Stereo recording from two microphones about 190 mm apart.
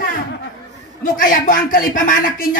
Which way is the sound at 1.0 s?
45° left (ahead or behind).